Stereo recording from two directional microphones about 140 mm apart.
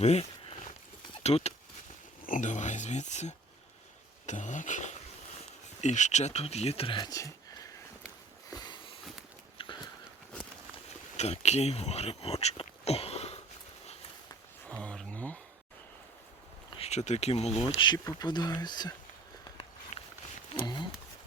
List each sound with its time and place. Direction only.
0.0 s a sound: 50° left (ahead or behind)
1.2 s speech: 50° left (ahead or behind)
2.2 s speech: 65° left (ahead or behind); by 7.7 s 25° left (ahead or behind)
8.4 s sniff: 30° left (ahead or behind)
9.6 s biting: 40° left (ahead or behind)
11.2 s speech: 50° left (ahead or behind)
14.8 s a sound: 5° left (ahead or behind)
16.7 s speech: 50° left (ahead or behind)
17.7 s speech: 30° left (ahead or behind)
19.9 s a sound: 60° left (ahead or behind)